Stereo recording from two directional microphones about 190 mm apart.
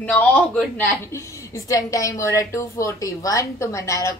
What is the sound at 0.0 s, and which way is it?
A woman's voice, 5° left (ahead or behind).